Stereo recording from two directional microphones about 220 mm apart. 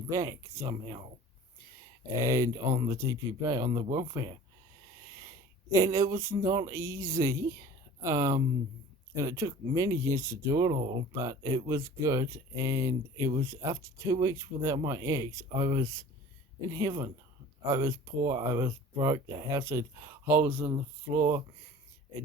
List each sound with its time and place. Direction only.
0.1 s speech: 15° right (ahead or behind)
2.2 s speech: 15° right (ahead or behind)
5.7 s speech: 15° right (ahead or behind)